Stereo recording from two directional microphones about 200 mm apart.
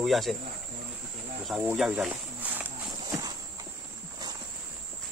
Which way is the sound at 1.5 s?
5° right (ahead or behind).